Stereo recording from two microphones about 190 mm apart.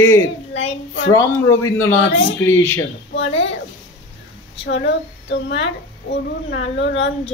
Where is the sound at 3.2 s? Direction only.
75° left (ahead or behind).